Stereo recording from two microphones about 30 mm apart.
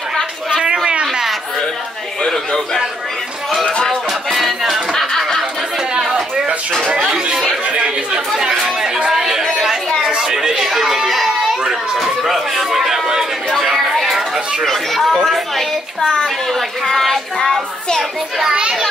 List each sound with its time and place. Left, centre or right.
2.2 s a sound: centre
4.3 s music: centre
5.8 s chatter: right
7.6 s chatter: right
8.7 s music: right
9.1 s chatter: centre
10.3 s chatter: centre
11.1 s a sound: centre
12.0 s chatter: centre
14.6 s chatter: centre
15.2 s a sound: centre
18.5 s a child's voice: right